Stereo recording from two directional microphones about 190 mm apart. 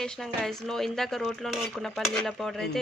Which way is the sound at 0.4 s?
Centre (ahead or behind).